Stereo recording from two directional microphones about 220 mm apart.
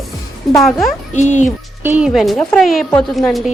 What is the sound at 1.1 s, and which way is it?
Speech, 35° left (ahead or behind).